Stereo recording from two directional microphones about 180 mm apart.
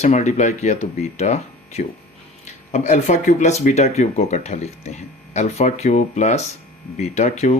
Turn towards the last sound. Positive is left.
turn(degrees=40)  # may be behind; listen again after turning